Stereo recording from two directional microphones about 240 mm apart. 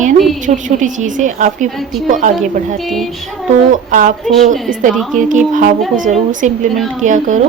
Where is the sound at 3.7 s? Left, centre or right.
Right.